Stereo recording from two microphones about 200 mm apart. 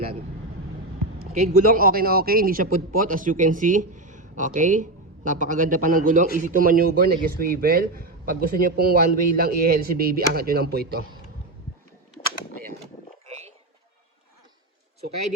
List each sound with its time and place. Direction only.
1.4 s speech: 45° right (ahead or behind)